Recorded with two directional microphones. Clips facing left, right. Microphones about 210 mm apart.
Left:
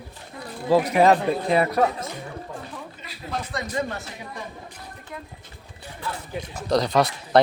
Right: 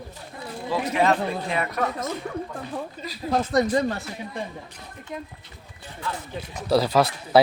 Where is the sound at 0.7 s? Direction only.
35° left (ahead or behind).